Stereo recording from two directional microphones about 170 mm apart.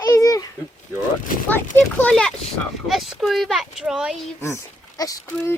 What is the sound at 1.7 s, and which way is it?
Speech, 15° left (ahead or behind).